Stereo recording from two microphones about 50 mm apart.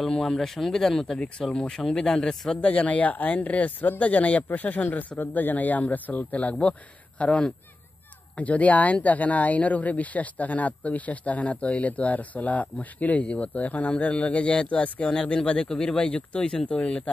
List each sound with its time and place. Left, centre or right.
0.0 s a man's voice: centre
15.7 s a man's voice: centre
16.0 s speech: left